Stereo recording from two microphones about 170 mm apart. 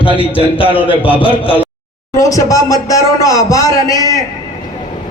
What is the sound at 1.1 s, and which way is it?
Speech, 30° left (ahead or behind).